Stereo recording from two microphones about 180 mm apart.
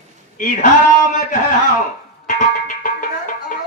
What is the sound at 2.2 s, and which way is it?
Music, 45° left (ahead or behind).